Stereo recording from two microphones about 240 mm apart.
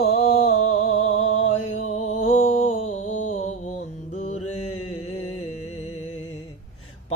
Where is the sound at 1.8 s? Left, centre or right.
Left.